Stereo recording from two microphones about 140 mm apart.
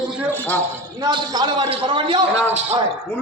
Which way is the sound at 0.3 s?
10° left (ahead or behind).